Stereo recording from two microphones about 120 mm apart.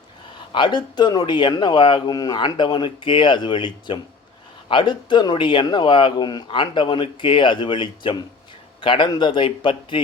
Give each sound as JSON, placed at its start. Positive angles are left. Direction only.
{"t": 0.5, "sound": "speech", "side_deg": 40}